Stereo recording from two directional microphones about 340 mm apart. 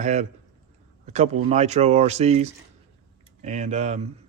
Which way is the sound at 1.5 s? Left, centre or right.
Centre.